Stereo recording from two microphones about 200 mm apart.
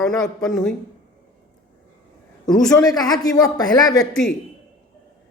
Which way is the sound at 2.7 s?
20° left (ahead or behind).